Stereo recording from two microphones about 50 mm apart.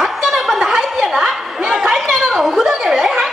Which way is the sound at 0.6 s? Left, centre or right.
Centre.